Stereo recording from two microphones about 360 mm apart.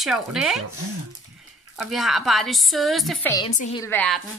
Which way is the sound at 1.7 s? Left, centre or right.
Centre.